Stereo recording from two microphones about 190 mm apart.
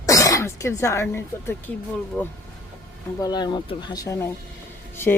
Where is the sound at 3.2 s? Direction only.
20° left (ahead or behind).